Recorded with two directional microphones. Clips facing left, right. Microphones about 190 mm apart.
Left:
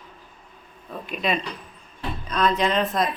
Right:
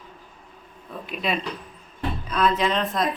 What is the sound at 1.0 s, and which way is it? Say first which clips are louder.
Speech: left 1 dB; centre (ahead or behind).